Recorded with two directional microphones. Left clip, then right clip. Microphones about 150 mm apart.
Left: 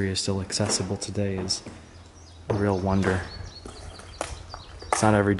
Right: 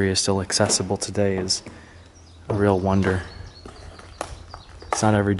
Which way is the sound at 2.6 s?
5° right (ahead or behind).